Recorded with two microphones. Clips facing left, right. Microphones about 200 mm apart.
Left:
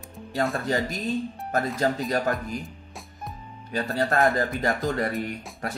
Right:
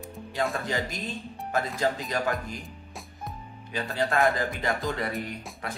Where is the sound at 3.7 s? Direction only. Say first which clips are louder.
Left 3 dB; 45° left (ahead or behind).